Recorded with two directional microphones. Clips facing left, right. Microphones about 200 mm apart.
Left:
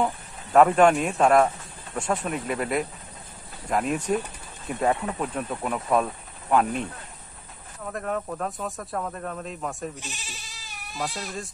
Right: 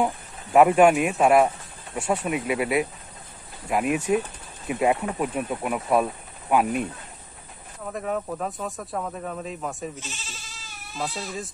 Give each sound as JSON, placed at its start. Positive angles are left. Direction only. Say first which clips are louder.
{"t": 0.0, "sound": "speech", "louder": "right 1 dB", "side_deg": -10}
{"t": 9.9, "sound": "goat", "louder": "right 1 dB", "side_deg": 15}